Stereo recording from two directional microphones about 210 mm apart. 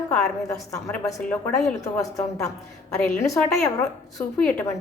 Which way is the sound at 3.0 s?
15° left (ahead or behind).